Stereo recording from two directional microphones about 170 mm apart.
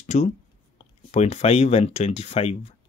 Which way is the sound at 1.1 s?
40° left (ahead or behind).